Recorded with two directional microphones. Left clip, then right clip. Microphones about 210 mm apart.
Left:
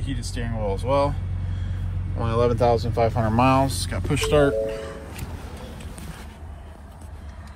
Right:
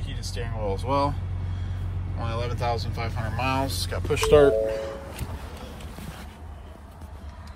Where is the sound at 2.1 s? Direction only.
5° left (ahead or behind).